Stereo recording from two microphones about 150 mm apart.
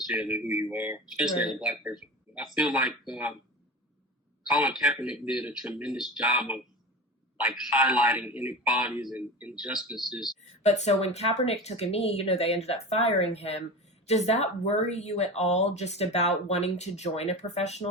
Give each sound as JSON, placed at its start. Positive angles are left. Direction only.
{"t": 0.1, "sound": "a man's voice", "side_deg": -5}
{"t": 4.4, "sound": "a man's voice", "side_deg": -5}
{"t": 10.6, "sound": "speech", "side_deg": 50}